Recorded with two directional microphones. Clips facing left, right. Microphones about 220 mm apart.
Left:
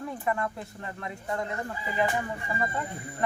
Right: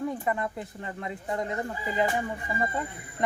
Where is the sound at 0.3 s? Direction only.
20° right (ahead or behind).